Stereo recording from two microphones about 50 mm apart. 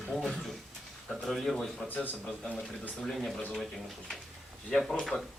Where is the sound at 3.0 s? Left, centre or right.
Centre.